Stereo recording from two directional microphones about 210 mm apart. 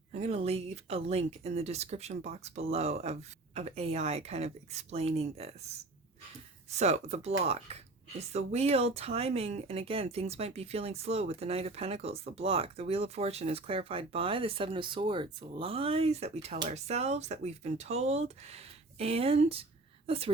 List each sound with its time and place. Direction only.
0.1 s speech: 30° right (ahead or behind)
6.7 s a woman's voice: 30° right (ahead or behind)